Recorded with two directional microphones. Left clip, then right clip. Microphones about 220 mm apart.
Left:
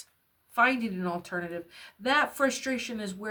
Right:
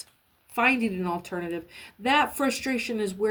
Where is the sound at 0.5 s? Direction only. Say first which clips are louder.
Right 2 dB; 10° left (ahead or behind).